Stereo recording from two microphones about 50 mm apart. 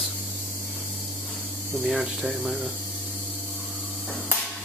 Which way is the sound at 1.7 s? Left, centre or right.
Centre.